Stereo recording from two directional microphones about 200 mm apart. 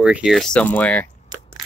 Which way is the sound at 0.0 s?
5° right (ahead or behind).